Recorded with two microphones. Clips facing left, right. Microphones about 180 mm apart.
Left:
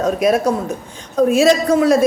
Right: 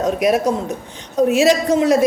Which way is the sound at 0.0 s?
15° right (ahead or behind).